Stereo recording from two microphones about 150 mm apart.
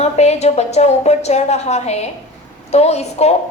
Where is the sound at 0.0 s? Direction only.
45° left (ahead or behind).